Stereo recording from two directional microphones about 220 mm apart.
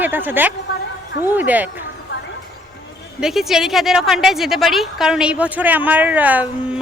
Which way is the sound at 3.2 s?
Centre (ahead or behind).